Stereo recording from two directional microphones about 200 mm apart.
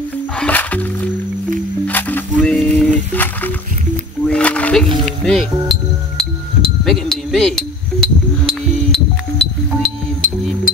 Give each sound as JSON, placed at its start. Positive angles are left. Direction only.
{"t": 0.4, "sound": "music", "side_deg": 10}
{"t": 1.9, "sound": "a sound", "side_deg": 10}
{"t": 4.3, "sound": "music", "side_deg": 5}